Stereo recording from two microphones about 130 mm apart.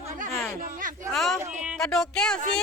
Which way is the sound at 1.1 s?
5° left (ahead or behind).